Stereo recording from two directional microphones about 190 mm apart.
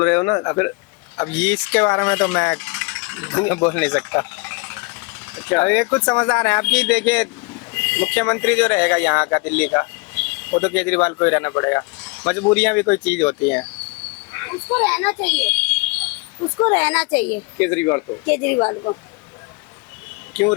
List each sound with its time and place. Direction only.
0.0 s speech: 10° left (ahead or behind)
14.3 s cricket: 10° left (ahead or behind)
14.8 s a child's voice: 5° left (ahead or behind)
18.6 s speech: 25° left (ahead or behind)